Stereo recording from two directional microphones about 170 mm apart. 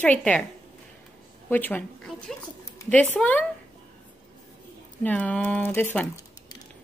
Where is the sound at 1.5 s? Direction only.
10° left (ahead or behind).